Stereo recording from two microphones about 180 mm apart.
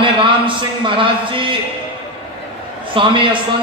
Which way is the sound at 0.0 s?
30° right (ahead or behind).